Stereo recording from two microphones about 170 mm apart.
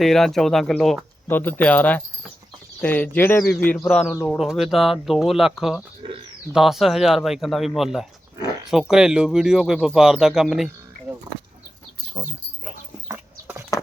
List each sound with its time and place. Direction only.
0.0 s speech: centre (ahead or behind)
4.1 s speech: 15° left (ahead or behind)
4.4 s speech: centre (ahead or behind)
6.0 s bird: 30° right (ahead or behind)
6.5 s speech: centre (ahead or behind)
13.7 s a sound: 20° left (ahead or behind)